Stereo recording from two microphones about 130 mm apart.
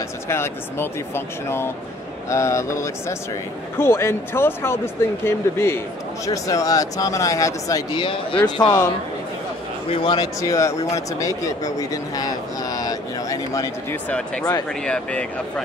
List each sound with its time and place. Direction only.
0.3 s speech: 20° left (ahead or behind)
8.0 s a man's voice: 45° left (ahead or behind)
9.8 s speech: 45° left (ahead or behind)
10.2 s speech: 25° left (ahead or behind)
14.0 s speech: 10° left (ahead or behind)